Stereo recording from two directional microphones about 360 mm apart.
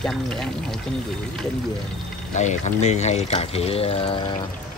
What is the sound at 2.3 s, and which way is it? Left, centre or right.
Speech, centre.